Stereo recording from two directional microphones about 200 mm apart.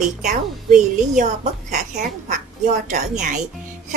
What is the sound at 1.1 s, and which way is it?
A woman's voice, 35° right (ahead or behind).